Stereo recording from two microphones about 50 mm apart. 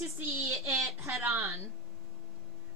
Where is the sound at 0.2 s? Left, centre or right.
Right.